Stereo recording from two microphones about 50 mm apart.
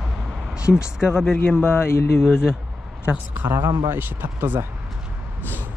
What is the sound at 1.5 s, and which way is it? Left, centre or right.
Speech, left.